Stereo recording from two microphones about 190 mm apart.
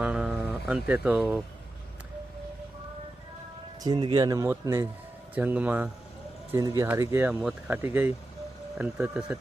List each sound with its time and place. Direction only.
0.0 s speech: 5° right (ahead or behind)
3.8 s speech: 25° right (ahead or behind); by 9.4 s 5° right (ahead or behind)